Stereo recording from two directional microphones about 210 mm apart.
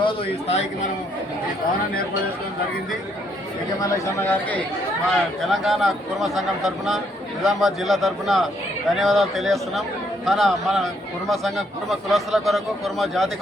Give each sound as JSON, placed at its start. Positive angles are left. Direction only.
{"t": 0.0, "sound": "speech", "side_deg": 30}
{"t": 3.8, "sound": "a man's voice", "side_deg": 15}
{"t": 5.5, "sound": "speech", "side_deg": 0}